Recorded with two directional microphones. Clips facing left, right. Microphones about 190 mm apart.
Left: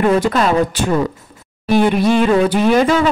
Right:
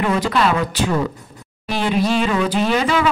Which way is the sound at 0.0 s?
45° left (ahead or behind).